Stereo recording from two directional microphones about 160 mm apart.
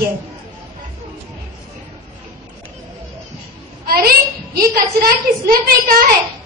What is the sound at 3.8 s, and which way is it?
A woman's voice, 70° right (ahead or behind).